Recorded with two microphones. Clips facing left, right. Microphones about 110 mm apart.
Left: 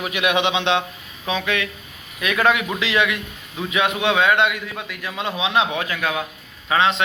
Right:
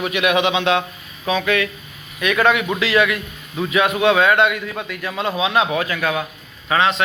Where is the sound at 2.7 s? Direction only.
20° left (ahead or behind).